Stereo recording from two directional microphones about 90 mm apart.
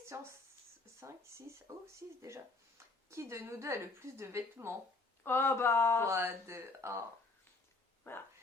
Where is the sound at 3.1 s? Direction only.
30° right (ahead or behind).